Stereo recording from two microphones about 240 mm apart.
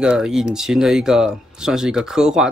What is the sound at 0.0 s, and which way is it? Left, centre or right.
Speech, centre.